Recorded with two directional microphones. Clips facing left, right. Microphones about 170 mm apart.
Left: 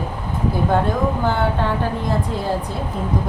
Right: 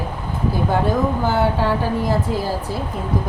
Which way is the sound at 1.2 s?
5° right (ahead or behind).